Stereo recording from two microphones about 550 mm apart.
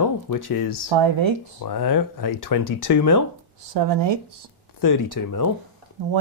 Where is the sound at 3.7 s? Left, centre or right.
Right.